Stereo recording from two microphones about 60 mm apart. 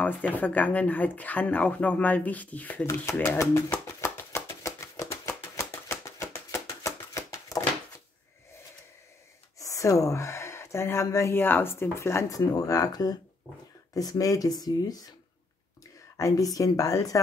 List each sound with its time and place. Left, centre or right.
0.0 s speech: left
2.9 s speech: left
4.0 s a sound: left
9.6 s a sound: left
11.1 s speech: left
11.3 s speech: left
12.3 s speech: left
16.2 s speech: left
17.1 s speech: left